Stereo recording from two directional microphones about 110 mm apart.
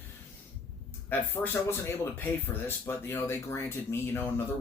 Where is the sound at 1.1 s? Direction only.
20° left (ahead or behind).